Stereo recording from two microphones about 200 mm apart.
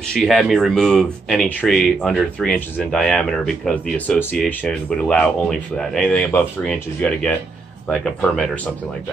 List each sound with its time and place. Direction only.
0.1 s speech: centre (ahead or behind)